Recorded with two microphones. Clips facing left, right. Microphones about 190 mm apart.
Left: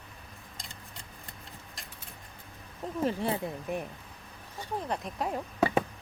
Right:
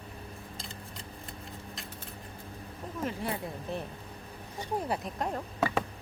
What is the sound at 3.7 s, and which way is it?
Speech, 15° left (ahead or behind).